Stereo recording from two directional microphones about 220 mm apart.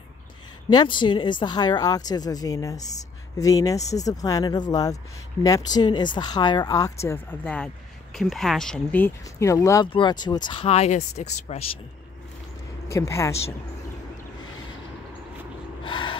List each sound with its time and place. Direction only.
0.7 s a woman's voice: 20° left (ahead or behind)
12.8 s speech: 15° left (ahead or behind)
15.8 s gasp: 20° left (ahead or behind)